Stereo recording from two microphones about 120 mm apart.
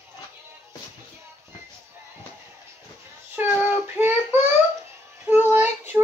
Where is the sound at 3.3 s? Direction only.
15° right (ahead or behind).